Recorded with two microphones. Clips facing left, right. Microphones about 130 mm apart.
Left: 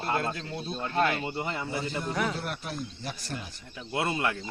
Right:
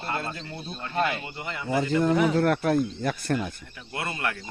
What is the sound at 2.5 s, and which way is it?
Speech, 60° right (ahead or behind).